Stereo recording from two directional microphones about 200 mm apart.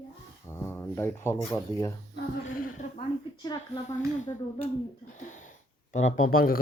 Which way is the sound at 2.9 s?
20° left (ahead or behind).